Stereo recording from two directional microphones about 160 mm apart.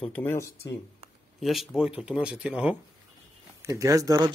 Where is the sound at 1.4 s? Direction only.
Centre (ahead or behind).